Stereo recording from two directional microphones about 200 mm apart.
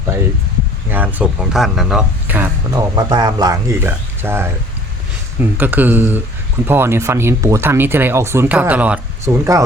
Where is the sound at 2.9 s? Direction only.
20° right (ahead or behind).